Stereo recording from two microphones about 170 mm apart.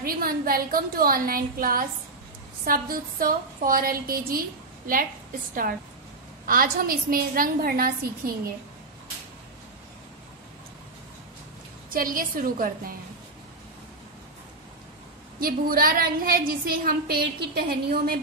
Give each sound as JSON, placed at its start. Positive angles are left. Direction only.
{"t": 0.0, "sound": "a woman's voice", "side_deg": -60}
{"t": 11.9, "sound": "a woman's voice", "side_deg": -55}
{"t": 15.4, "sound": "a woman's voice", "side_deg": -60}